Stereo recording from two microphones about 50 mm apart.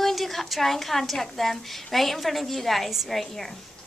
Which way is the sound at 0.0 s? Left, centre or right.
Centre.